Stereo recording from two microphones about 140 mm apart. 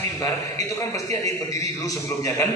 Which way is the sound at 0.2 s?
25° left (ahead or behind).